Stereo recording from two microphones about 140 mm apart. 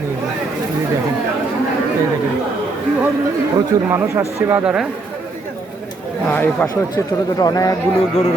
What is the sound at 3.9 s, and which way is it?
Speech, 20° right (ahead or behind).